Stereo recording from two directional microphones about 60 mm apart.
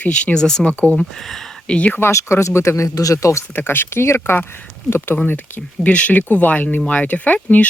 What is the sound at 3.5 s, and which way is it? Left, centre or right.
Speech, left.